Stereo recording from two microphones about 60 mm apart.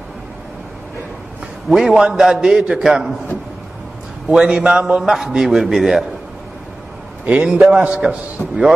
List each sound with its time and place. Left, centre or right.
1.7 s a man's voice: centre
4.3 s a man's voice: centre
7.2 s a man's voice: centre